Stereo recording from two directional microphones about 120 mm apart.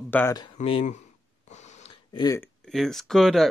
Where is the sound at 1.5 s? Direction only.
70° left (ahead or behind).